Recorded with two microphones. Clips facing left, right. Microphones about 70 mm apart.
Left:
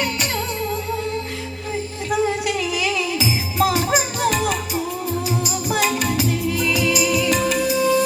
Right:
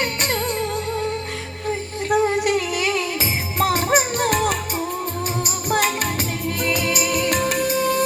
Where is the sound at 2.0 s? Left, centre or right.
Right.